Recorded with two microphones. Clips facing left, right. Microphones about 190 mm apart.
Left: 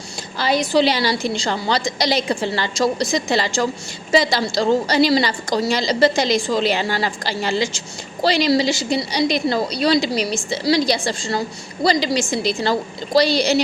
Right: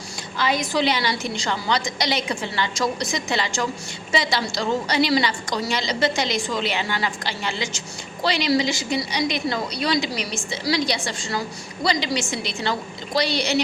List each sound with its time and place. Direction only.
0.3 s a woman's voice: 35° left (ahead or behind)